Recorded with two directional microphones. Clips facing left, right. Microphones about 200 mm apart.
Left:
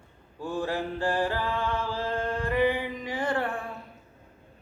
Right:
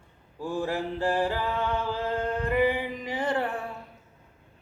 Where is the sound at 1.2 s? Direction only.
15° right (ahead or behind).